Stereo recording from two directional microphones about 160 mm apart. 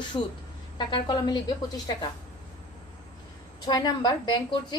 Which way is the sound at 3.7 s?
25° left (ahead or behind).